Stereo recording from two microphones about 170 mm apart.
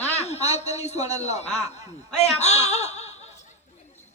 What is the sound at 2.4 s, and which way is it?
Speech, 40° left (ahead or behind).